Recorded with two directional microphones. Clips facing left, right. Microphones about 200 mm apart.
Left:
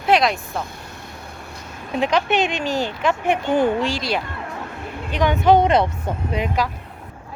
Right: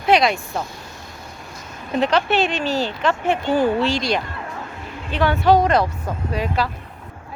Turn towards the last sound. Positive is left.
turn(degrees=20)  # may be behind; listen again after turning